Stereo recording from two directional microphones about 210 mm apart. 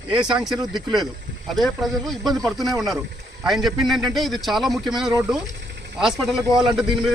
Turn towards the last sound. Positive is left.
turn(degrees=0)  # may be behind; listen again after turning